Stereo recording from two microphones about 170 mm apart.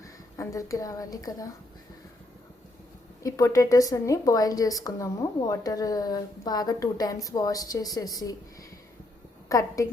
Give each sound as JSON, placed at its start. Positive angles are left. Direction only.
{"t": 0.0, "sound": "speech", "side_deg": 20}
{"t": 3.2, "sound": "speech", "side_deg": 20}
{"t": 9.5, "sound": "speech", "side_deg": 20}